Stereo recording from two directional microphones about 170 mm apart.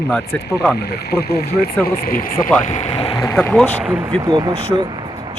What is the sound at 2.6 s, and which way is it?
Speech, 45° left (ahead or behind).